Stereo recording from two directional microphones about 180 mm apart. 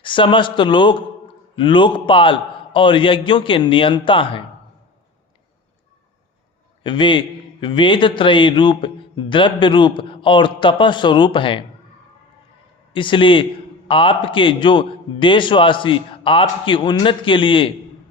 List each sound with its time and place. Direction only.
0.0 s a man's voice: 25° left (ahead or behind)
6.8 s a man's voice: 25° left (ahead or behind)
12.9 s a man's voice: 30° left (ahead or behind)